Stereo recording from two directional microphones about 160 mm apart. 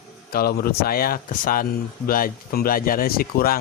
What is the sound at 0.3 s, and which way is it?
Speech, 70° left (ahead or behind).